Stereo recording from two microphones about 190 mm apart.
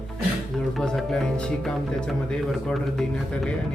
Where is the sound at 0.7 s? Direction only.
Centre (ahead or behind).